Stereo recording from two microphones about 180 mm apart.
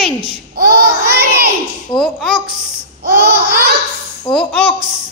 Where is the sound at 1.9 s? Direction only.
5° left (ahead or behind).